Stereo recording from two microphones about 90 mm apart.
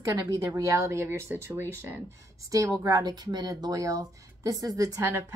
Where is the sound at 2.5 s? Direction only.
40° right (ahead or behind).